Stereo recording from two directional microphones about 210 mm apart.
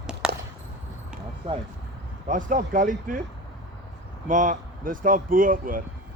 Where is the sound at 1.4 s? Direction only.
25° right (ahead or behind).